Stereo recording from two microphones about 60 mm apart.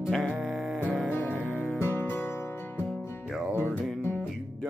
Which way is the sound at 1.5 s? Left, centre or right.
Left.